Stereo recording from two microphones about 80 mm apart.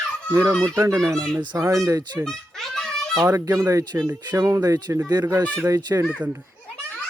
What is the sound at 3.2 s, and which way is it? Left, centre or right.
Speech, right.